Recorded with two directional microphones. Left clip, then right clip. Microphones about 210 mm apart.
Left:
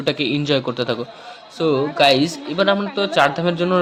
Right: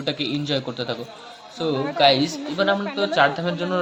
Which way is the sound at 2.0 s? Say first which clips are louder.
Left 1 dB; 25° left (ahead or behind).